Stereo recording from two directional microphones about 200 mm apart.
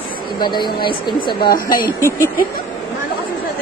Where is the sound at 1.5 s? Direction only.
45° left (ahead or behind).